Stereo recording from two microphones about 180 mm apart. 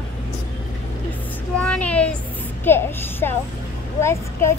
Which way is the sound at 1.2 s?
10° left (ahead or behind).